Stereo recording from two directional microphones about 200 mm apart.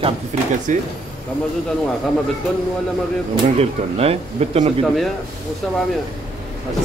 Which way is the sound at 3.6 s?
30° right (ahead or behind).